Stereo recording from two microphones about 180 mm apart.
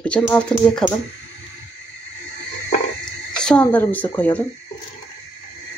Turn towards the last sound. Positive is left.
turn(degrees=10)  # may be behind; listen again after turning